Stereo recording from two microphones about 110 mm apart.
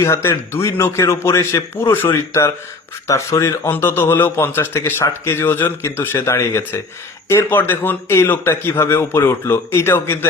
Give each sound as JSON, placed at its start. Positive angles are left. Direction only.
{"t": 0.0, "sound": "a man's voice", "side_deg": 25}